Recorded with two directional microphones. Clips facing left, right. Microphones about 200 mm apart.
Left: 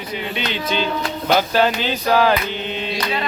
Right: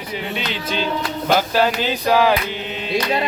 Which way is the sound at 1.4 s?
5° right (ahead or behind).